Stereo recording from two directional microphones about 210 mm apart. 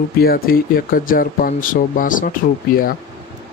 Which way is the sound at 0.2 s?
45° left (ahead or behind).